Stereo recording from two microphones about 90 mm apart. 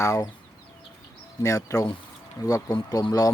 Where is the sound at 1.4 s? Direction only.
35° left (ahead or behind).